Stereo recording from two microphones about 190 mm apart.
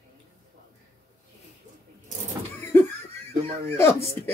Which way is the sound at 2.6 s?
10° left (ahead or behind).